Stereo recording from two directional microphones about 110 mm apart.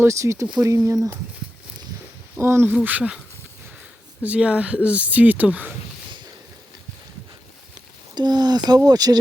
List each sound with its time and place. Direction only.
0.0 s speech: 25° right (ahead or behind)
2.4 s speech: 20° right (ahead or behind)
2.8 s speech: 10° right (ahead or behind)
4.2 s speech: 10° right (ahead or behind)
8.1 s speech: 40° right (ahead or behind)